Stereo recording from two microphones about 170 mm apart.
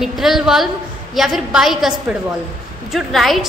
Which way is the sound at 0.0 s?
Centre (ahead or behind).